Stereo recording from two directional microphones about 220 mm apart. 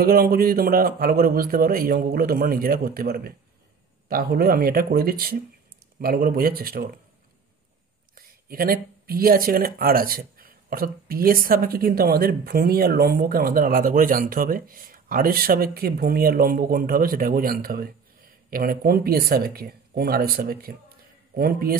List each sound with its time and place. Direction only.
0.0 s speech: 40° right (ahead or behind)
8.1 s speech: 40° right (ahead or behind)